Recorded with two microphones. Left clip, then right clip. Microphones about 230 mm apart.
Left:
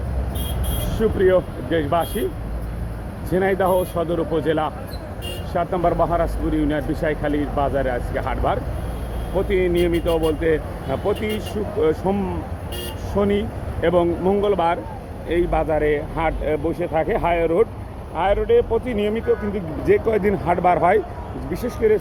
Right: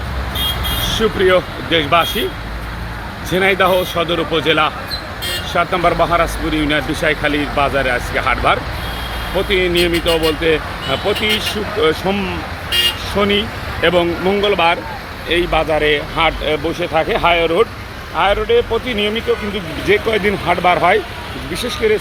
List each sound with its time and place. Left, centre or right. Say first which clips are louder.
0.9 s speech: right 3 dB; centre
3.2 s speech: right 6 dB; centre
3.7 s speech: right 5 dB; right
4.0 s speech: right 5 dB; centre